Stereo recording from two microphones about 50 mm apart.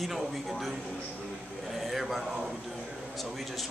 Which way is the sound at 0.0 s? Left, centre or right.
Centre.